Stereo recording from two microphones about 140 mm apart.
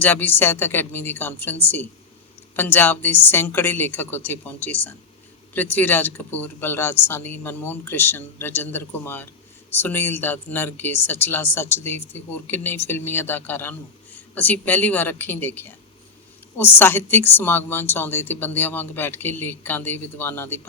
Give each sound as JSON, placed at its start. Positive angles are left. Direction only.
{"t": 0.0, "sound": "speech", "side_deg": 15}